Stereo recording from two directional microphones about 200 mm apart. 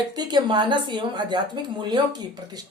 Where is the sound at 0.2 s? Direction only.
20° right (ahead or behind).